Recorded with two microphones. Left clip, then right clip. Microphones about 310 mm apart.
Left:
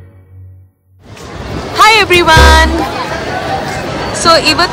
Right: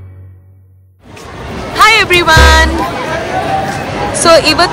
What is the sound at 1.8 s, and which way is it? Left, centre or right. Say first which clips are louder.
Music: left 1 dB; centre.